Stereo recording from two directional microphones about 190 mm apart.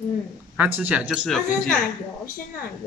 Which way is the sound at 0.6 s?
10° right (ahead or behind).